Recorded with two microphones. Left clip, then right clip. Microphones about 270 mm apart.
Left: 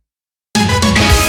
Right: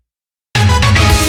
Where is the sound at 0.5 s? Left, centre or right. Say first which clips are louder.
Even; centre.